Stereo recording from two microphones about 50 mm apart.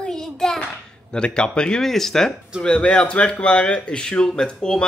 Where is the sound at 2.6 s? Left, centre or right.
Left.